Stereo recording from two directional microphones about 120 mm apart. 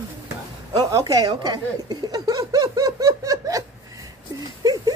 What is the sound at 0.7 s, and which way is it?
Speech, 30° right (ahead or behind).